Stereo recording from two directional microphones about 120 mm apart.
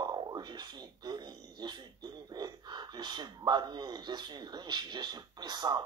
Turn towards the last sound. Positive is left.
turn(degrees=-35)  # may be behind; listen again after turning